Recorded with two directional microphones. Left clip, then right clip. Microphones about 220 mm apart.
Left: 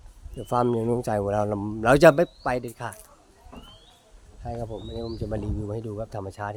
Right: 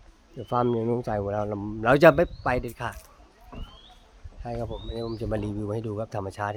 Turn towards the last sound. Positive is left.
turn(degrees=-15)  # may be behind; listen again after turning